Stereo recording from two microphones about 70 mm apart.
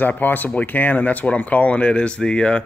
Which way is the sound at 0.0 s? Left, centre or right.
Left.